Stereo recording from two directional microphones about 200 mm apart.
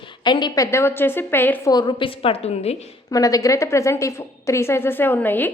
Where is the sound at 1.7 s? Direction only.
20° left (ahead or behind).